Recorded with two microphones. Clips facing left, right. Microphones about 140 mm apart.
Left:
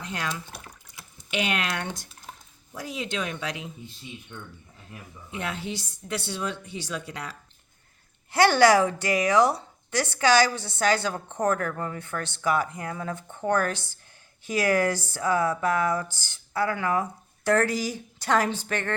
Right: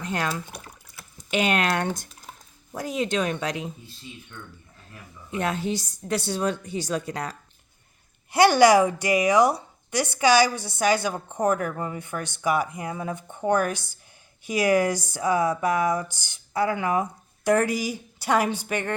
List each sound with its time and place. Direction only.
0.0 s a woman's voice: 45° right (ahead or behind)
5.4 s a woman's voice: 45° right (ahead or behind)
8.3 s speech: 15° right (ahead or behind)